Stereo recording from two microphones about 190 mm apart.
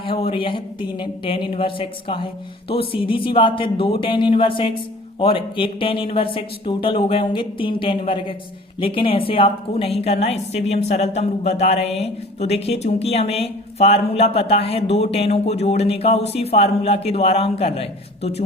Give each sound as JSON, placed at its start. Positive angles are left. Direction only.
{"t": 0.0, "sound": "a woman's voice", "side_deg": 30}